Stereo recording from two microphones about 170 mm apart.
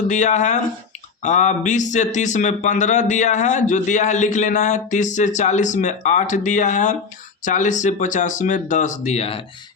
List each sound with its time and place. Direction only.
0.1 s speech: 45° left (ahead or behind)